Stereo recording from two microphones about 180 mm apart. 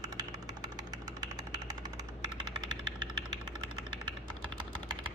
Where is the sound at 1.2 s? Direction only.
20° right (ahead or behind).